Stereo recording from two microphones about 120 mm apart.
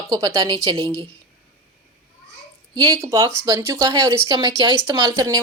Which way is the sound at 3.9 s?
40° right (ahead or behind).